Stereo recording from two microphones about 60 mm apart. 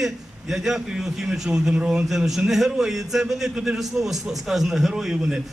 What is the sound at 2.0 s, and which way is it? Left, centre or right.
A man's voice, centre.